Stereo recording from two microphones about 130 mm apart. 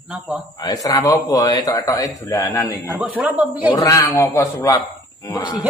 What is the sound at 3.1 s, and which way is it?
Speech, 10° right (ahead or behind).